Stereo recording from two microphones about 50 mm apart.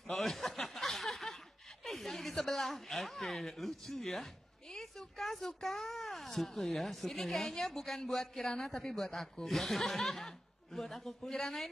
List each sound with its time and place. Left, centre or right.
0.1 s chuckle: centre
1.9 s speech: centre
8.5 s a woman's voice: centre